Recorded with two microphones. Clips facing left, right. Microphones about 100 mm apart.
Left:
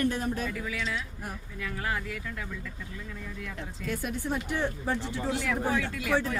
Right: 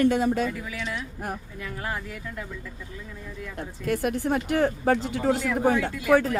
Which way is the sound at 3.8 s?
60° right (ahead or behind).